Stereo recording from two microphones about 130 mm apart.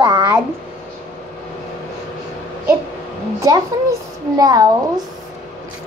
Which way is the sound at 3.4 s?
25° right (ahead or behind).